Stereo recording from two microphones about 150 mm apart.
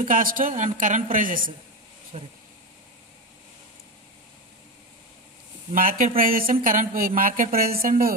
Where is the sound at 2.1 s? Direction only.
50° right (ahead or behind).